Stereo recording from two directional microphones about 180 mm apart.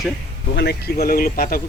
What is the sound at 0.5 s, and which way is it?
Speech, 65° left (ahead or behind).